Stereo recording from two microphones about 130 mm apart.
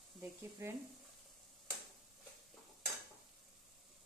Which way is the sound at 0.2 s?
20° right (ahead or behind).